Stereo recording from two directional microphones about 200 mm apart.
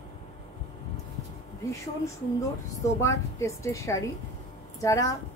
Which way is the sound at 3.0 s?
15° left (ahead or behind).